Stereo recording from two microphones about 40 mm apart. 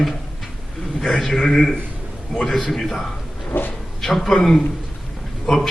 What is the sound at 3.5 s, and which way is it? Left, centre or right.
Speech, left.